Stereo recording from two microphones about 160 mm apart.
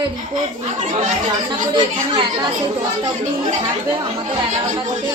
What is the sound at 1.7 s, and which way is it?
Speech, 25° right (ahead or behind).